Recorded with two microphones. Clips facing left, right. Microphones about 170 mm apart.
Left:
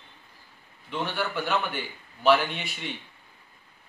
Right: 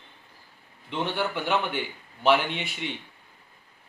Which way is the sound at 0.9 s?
20° right (ahead or behind).